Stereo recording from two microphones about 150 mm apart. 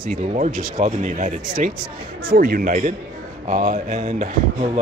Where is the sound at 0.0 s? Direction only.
60° right (ahead or behind).